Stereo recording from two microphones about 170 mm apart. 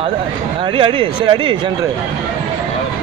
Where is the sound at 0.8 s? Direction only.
30° right (ahead or behind).